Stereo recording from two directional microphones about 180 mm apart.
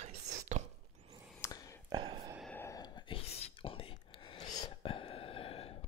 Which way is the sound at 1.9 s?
25° right (ahead or behind).